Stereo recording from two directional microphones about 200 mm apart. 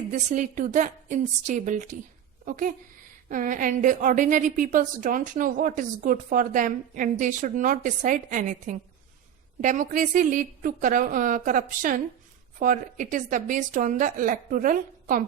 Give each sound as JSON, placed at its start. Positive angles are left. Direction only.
{"t": 0.1, "sound": "a woman's voice", "side_deg": -40}